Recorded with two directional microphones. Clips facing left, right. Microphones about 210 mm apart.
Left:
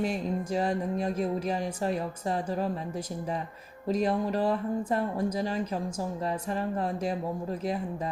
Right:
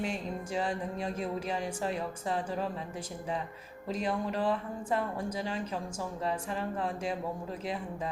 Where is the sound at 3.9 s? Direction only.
40° left (ahead or behind).